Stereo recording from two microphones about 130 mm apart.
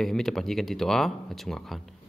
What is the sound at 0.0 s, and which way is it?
Speech, 5° left (ahead or behind).